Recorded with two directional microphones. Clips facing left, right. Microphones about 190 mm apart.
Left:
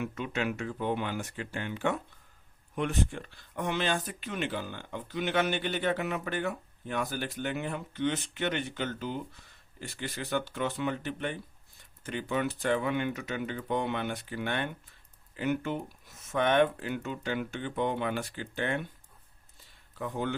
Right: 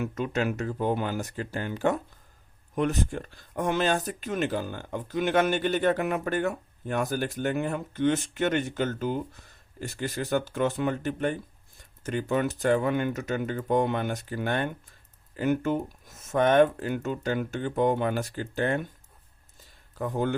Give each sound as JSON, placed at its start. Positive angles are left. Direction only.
{"t": 0.0, "sound": "speech", "side_deg": -40}
{"t": 20.0, "sound": "speech", "side_deg": -45}